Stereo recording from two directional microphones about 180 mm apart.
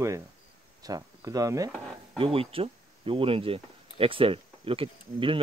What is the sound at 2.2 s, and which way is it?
Speech, 30° right (ahead or behind).